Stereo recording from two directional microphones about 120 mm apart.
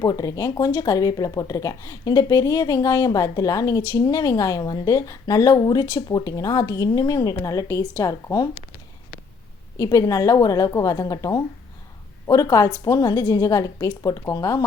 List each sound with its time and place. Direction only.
0.0 s speech: 30° left (ahead or behind)
9.7 s a woman's voice: 30° left (ahead or behind)